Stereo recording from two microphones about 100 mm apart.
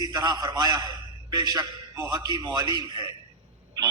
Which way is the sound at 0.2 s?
35° right (ahead or behind).